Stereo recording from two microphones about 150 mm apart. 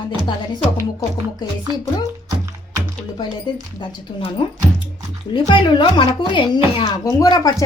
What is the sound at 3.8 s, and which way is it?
Speech, 35° left (ahead or behind).